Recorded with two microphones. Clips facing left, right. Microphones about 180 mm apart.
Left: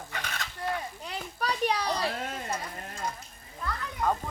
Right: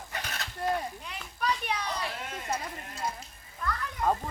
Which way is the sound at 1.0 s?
35° left (ahead or behind).